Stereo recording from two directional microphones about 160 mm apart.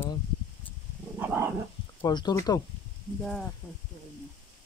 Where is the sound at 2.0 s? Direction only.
25° left (ahead or behind).